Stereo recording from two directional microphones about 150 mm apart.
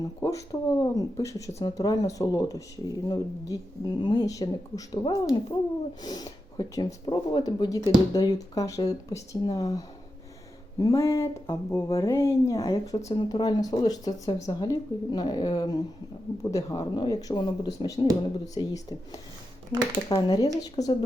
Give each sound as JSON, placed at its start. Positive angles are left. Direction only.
{"t": 0.2, "sound": "speech", "side_deg": 20}